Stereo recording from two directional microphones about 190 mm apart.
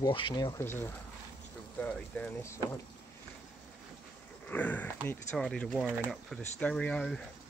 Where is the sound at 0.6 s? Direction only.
10° left (ahead or behind).